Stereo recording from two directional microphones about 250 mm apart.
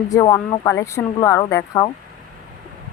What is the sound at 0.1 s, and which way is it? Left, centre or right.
Speech, centre.